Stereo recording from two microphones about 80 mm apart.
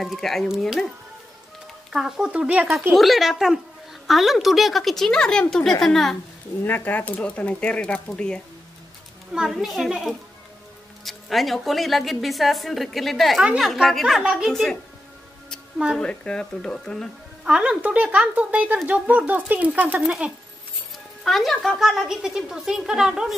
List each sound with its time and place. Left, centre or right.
0.0 s a woman's voice: centre
1.9 s speech: centre
2.9 s a woman's voice: centre
6.6 s speech: left
9.3 s a woman's voice: centre
16.0 s speech: centre
17.5 s speech: centre
20.0 s a woman's voice: centre